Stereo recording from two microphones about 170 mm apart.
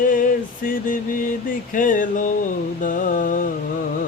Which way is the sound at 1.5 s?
50° left (ahead or behind).